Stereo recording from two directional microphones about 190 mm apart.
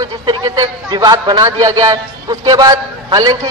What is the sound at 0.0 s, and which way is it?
A man's voice, 20° right (ahead or behind).